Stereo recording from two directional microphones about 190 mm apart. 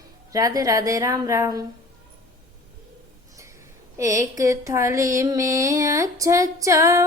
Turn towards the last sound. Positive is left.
turn(degrees=-15)  # may be behind; listen again after turning